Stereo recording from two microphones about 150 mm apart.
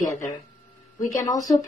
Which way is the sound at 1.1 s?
25° left (ahead or behind).